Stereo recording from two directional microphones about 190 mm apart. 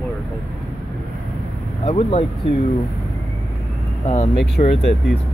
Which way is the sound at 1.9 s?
35° left (ahead or behind).